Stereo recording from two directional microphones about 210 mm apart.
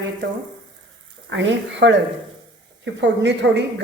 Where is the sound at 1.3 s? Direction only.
60° right (ahead or behind).